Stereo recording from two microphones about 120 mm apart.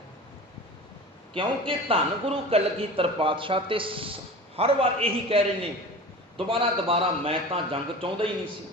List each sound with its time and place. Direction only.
1.3 s a man's voice: 45° right (ahead or behind)